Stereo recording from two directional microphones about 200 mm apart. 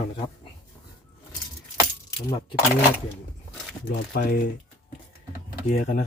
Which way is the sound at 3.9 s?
45° left (ahead or behind).